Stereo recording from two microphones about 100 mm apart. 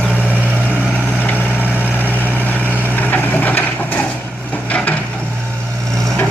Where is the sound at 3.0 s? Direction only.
20° left (ahead or behind).